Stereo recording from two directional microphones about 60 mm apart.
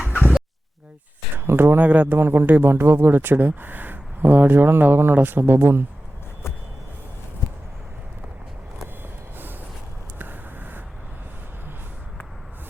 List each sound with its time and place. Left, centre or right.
1.5 s speech: right
1.8 s speech: right
2.1 s speech: right
10.2 s a sound: right